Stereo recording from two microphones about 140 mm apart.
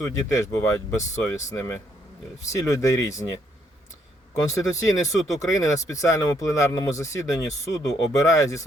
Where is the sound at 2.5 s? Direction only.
20° left (ahead or behind).